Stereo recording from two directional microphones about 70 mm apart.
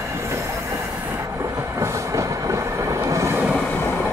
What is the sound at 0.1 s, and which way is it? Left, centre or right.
Train, right.